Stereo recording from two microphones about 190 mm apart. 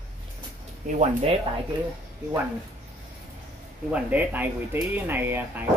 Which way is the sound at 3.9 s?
10° right (ahead or behind).